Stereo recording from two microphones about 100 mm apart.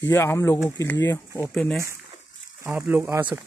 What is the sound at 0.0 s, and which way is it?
Speech, 25° left (ahead or behind).